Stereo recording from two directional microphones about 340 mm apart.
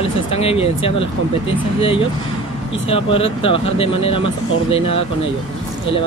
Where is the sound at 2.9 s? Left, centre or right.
Centre.